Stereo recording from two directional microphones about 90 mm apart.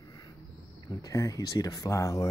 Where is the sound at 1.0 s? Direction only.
35° left (ahead or behind).